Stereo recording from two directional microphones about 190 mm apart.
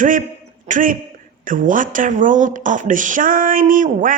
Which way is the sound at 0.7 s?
45° right (ahead or behind).